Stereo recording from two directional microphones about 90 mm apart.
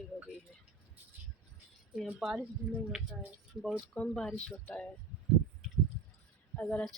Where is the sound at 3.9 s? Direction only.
10° left (ahead or behind).